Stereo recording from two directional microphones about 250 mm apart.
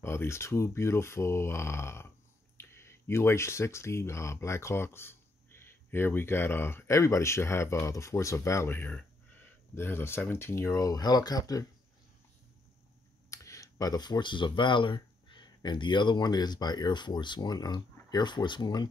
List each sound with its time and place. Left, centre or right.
0.0 s speech: centre
13.3 s speech: centre